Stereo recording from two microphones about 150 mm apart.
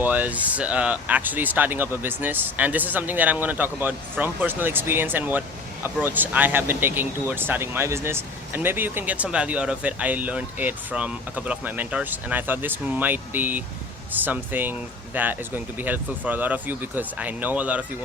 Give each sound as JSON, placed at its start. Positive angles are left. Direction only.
{"t": 0.0, "sound": "speech", "side_deg": -10}